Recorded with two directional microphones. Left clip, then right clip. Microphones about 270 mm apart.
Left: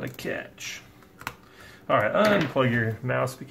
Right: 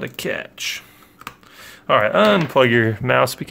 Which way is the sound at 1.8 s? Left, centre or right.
Right.